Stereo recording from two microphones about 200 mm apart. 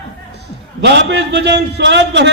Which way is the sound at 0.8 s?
60° right (ahead or behind).